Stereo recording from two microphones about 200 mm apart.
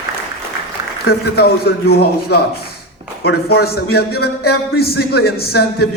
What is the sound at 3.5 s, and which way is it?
A man's voice, 50° left (ahead or behind).